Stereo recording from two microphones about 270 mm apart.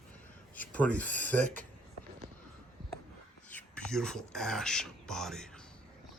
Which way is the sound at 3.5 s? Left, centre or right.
Centre.